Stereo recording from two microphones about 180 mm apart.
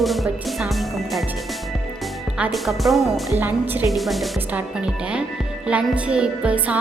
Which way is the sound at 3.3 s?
10° right (ahead or behind).